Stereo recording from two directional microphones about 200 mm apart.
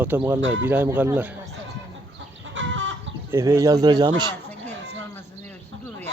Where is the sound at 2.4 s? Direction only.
70° right (ahead or behind).